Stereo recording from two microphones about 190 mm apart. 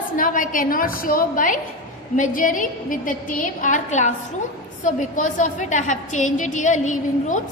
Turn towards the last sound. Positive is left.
turn(degrees=40)  # may be behind; listen again after turning